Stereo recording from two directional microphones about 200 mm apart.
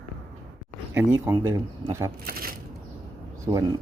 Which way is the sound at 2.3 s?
50° right (ahead or behind).